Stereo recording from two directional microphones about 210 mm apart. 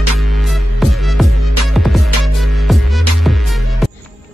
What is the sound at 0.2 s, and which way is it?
Music, centre (ahead or behind).